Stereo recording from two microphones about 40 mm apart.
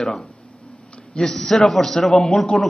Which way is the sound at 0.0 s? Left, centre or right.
Centre.